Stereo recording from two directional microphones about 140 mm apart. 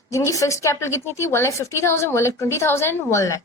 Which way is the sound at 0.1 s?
20° left (ahead or behind).